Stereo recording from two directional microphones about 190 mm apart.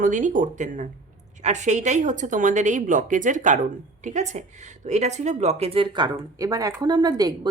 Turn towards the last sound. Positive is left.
turn(degrees=-20)  # may be behind; listen again after turning